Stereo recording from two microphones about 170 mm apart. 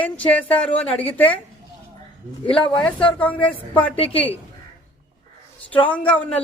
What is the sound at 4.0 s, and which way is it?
Speech, 35° left (ahead or behind).